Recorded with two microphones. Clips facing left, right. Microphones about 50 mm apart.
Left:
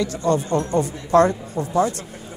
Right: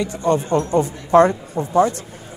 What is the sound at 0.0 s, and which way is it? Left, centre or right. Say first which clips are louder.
Speech: right 1 dB; right.